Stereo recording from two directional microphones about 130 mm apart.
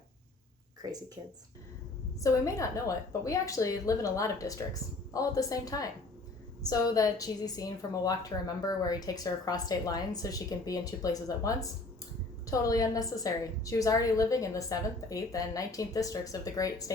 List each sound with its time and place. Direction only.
2.2 s a woman's voice: 25° left (ahead or behind)